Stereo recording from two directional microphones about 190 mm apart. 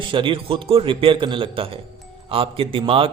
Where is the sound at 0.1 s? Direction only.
25° right (ahead or behind).